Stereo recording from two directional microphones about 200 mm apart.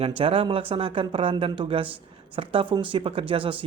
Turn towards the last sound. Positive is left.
turn(degrees=-25)  # may be behind; listen again after turning